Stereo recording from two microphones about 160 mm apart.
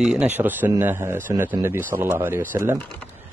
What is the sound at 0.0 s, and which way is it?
Speech, 5° right (ahead or behind).